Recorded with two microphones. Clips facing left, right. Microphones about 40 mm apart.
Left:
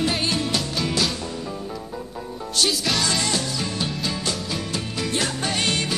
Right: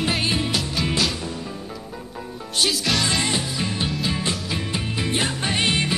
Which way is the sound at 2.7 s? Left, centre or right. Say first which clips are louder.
Right 2 dB; centre.